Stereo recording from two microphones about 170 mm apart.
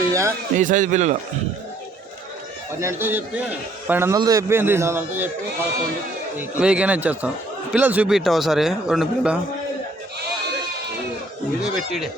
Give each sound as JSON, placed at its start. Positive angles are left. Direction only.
{"t": 0.1, "sound": "music", "side_deg": -15}
{"t": 0.5, "sound": "a man's voice", "side_deg": -50}
{"t": 2.8, "sound": "a man's voice", "side_deg": -15}
{"t": 6.3, "sound": "a man's voice", "side_deg": -5}
{"t": 11.6, "sound": "a sound", "side_deg": 0}